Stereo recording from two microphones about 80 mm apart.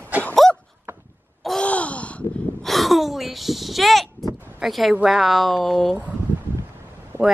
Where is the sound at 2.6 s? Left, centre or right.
Centre.